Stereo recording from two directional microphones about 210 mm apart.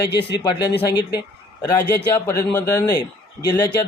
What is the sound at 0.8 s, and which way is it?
A man's voice, 15° left (ahead or behind).